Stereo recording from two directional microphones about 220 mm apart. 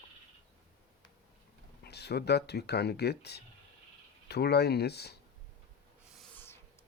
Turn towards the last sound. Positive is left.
turn(degrees=5)  # may be behind; listen again after turning